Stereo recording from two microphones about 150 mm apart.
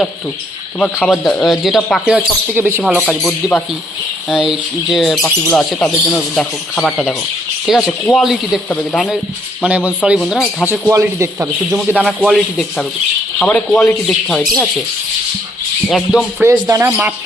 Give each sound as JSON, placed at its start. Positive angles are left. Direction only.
{"t": 1.0, "sound": "speech", "side_deg": 0}
{"t": 3.2, "sound": "speech", "side_deg": 5}
{"t": 9.6, "sound": "speech", "side_deg": -10}
{"t": 10.2, "sound": "speech", "side_deg": 0}
{"t": 10.7, "sound": "speech", "side_deg": -15}
{"t": 12.0, "sound": "speech", "side_deg": 0}
{"t": 15.9, "sound": "speech", "side_deg": 0}
{"t": 16.4, "sound": "speech", "side_deg": -20}